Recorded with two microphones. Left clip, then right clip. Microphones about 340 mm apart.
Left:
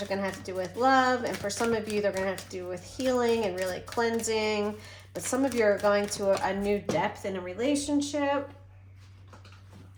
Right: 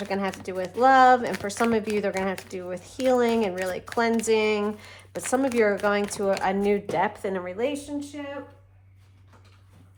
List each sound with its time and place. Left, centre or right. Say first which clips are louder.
0.1 s speech: right 6 dB; right